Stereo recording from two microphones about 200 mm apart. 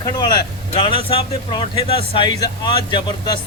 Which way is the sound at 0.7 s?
25° left (ahead or behind).